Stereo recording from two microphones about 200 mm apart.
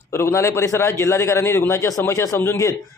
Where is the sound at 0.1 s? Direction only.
15° left (ahead or behind).